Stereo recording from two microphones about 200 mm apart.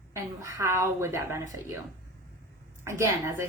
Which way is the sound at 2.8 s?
15° right (ahead or behind).